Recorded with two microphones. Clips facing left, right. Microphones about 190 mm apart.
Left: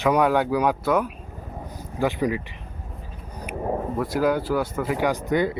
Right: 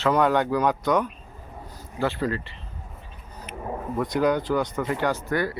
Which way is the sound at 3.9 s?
5° left (ahead or behind).